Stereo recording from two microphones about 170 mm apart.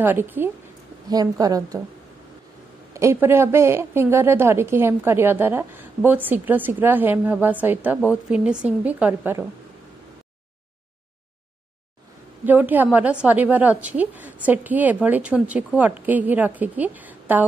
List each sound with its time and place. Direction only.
0.0 s a woman's voice: 10° right (ahead or behind)
1.0 s a woman's voice: 25° right (ahead or behind)
2.9 s a woman's voice: 15° right (ahead or behind)
12.4 s a woman's voice: 10° right (ahead or behind)